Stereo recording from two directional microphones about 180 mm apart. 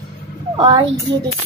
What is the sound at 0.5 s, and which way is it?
Speech, 25° right (ahead or behind).